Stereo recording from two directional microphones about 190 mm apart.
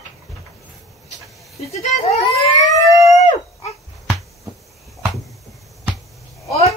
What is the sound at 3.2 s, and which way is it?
Dog, 35° left (ahead or behind).